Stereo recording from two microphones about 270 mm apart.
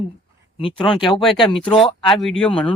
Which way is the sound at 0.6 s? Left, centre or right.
Centre.